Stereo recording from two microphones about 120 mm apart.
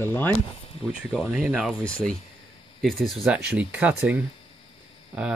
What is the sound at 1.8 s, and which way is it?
Speech, 10° left (ahead or behind).